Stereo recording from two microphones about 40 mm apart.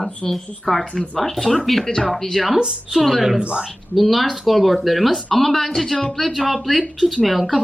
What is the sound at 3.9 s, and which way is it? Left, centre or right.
A woman's voice, centre.